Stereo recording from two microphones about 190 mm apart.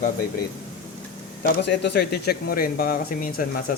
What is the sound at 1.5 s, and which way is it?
Speech, 65° left (ahead or behind).